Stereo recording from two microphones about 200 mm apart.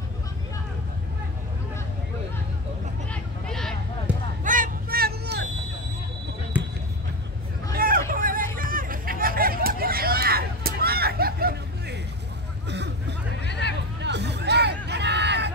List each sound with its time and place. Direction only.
3.1 s vehicle: 5° left (ahead or behind)
4.1 s basketball bounce: 5° right (ahead or behind)
4.5 s vehicle: 45° right (ahead or behind)
6.5 s basketball bounce: 10° right (ahead or behind)
7.7 s hubbub: 45° right (ahead or behind)
13.4 s hubbub: 60° left (ahead or behind)
14.0 s hubbub: 60° right (ahead or behind)